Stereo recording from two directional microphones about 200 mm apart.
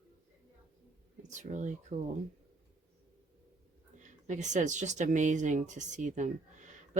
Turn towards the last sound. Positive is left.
turn(degrees=-40)  # may be behind; listen again after turning